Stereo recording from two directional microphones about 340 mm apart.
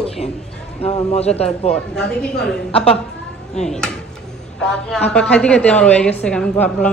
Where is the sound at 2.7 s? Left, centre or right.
Centre.